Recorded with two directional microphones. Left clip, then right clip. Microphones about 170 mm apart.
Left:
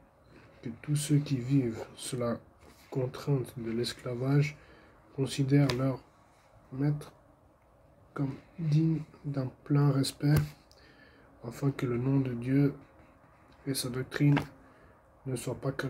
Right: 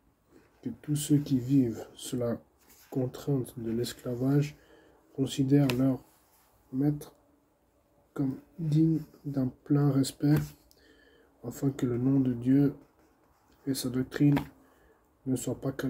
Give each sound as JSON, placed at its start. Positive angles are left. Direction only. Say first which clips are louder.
{"t": 0.6, "sound": "speech", "louder": "right 2 dB", "side_deg": -35}
{"t": 11.4, "sound": "speech", "louder": "right 2 dB", "side_deg": -35}